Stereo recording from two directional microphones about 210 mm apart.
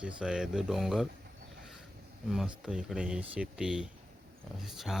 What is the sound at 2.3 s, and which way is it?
Speech, centre (ahead or behind).